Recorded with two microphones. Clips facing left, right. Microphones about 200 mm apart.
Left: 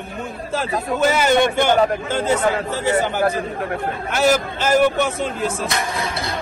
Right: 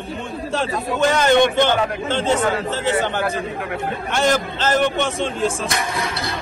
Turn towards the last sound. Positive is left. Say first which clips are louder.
# even
turn(degrees=5)  # may be behind; listen again after turning